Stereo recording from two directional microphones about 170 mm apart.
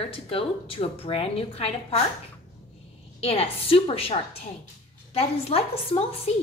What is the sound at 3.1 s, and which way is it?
Speech, 35° left (ahead or behind).